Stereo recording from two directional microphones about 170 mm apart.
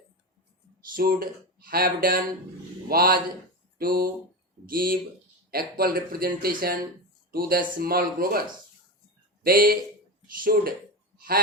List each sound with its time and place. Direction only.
0.9 s speech: 60° right (ahead or behind)
9.4 s speech: 60° right (ahead or behind)